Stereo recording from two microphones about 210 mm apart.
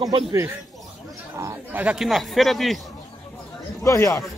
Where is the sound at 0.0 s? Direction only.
20° right (ahead or behind); by 2.8 s centre (ahead or behind).